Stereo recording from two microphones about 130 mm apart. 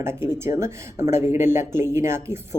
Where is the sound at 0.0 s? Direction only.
20° right (ahead or behind).